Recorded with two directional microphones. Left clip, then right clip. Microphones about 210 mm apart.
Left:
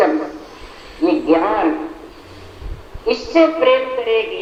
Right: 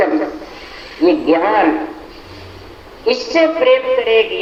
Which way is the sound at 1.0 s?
45° right (ahead or behind).